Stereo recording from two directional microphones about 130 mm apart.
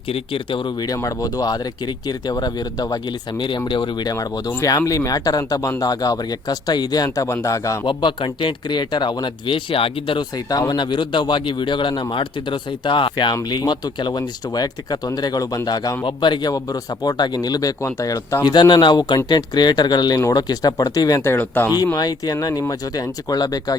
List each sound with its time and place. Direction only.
0.1 s speech: 40° left (ahead or behind)
3.7 s speech: 35° left (ahead or behind)
7.9 s speech: 40° left (ahead or behind)
21.3 s speech: 15° left (ahead or behind)
21.9 s speech: 30° left (ahead or behind)